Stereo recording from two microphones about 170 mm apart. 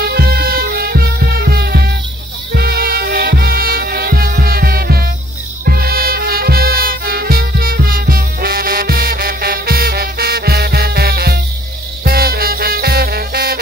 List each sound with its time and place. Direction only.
0.0 s music: 65° right (ahead or behind)